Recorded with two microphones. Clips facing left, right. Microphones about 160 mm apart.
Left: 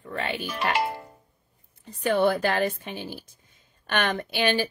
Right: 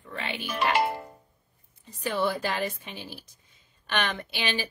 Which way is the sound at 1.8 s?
60° left (ahead or behind).